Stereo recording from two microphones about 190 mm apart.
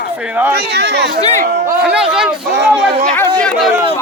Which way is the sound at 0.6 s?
60° right (ahead or behind).